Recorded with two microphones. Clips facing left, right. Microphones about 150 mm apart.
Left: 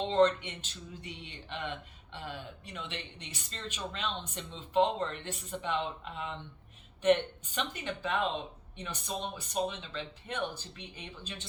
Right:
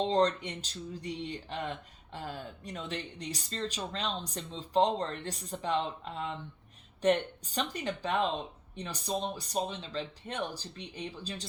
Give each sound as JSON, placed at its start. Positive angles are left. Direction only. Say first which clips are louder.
{"t": 0.0, "sound": "speech", "louder": "left 1 dB", "side_deg": -35}